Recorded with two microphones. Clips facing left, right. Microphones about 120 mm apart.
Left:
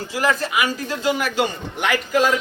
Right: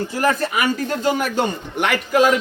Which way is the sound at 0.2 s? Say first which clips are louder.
Right 1 dB; 50° right (ahead or behind).